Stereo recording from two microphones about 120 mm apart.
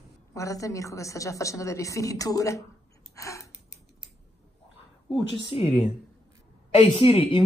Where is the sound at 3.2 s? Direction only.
25° left (ahead or behind).